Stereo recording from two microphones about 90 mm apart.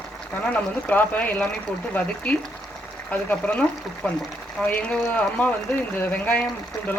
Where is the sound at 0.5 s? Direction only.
20° left (ahead or behind).